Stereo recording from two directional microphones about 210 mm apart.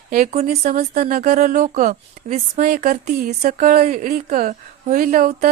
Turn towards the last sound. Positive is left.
turn(degrees=-45)  # may be behind; listen again after turning